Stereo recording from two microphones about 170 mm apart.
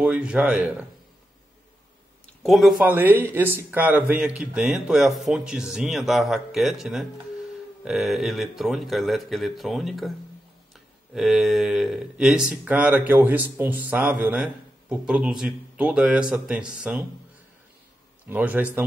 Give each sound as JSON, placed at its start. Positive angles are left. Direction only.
{"t": 0.0, "sound": "speech", "side_deg": -5}
{"t": 2.2, "sound": "a sound", "side_deg": 0}
{"t": 2.8, "sound": "speech", "side_deg": -10}
{"t": 11.1, "sound": "speech", "side_deg": 0}
{"t": 18.3, "sound": "speech", "side_deg": -10}